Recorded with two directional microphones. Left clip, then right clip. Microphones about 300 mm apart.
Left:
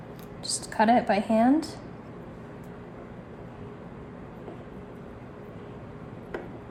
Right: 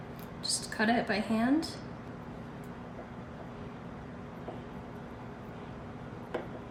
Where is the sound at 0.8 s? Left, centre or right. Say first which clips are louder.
Left 9 dB; centre.